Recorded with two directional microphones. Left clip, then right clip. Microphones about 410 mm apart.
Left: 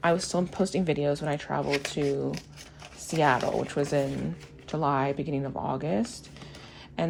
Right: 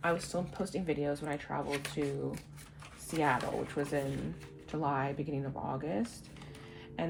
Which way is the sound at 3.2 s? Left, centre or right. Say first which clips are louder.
Left 7 dB; left.